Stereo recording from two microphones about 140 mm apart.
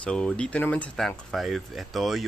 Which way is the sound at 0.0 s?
5° left (ahead or behind).